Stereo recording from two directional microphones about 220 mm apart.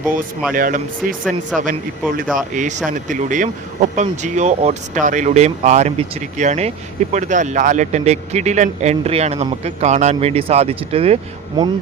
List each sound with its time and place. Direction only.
0.5 s speech: 40° right (ahead or behind); by 11.7 s 25° right (ahead or behind)